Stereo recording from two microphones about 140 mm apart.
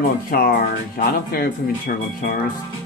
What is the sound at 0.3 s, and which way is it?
Speech, 90° left.